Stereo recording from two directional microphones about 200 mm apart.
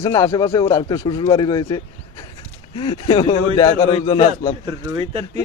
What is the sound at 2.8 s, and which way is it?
Speech, 25° left (ahead or behind).